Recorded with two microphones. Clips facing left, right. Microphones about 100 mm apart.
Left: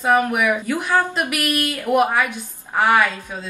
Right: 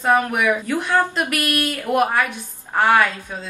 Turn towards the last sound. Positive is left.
turn(degrees=5)  # may be behind; listen again after turning